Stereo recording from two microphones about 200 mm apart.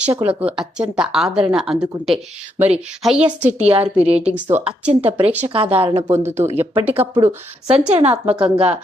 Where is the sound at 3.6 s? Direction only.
30° right (ahead or behind).